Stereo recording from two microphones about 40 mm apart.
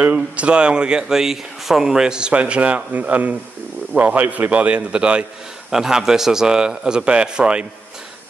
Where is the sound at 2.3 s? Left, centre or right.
Right.